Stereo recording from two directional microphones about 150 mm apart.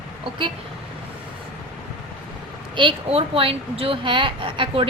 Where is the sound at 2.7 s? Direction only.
35° right (ahead or behind).